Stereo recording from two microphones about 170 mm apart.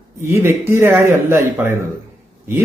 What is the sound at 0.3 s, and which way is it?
A man's voice, 15° right (ahead or behind).